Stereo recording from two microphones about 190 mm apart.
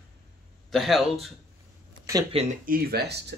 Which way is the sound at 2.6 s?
55° right (ahead or behind).